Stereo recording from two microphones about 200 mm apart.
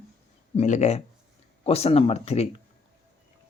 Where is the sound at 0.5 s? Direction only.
35° left (ahead or behind).